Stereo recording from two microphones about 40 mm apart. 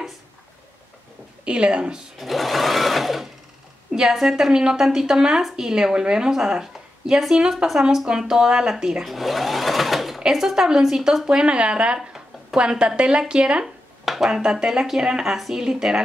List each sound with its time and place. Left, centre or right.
1.4 s speech: right
2.1 s sewing machine: centre
4.1 s speech: centre
9.0 s sewing machine: centre
10.2 s a sound: centre
10.5 s a woman's voice: centre
11.2 s speech: right
14.0 s a sound: centre
14.3 s speech: centre